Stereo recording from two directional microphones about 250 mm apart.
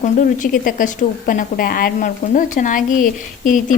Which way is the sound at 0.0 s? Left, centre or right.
Left.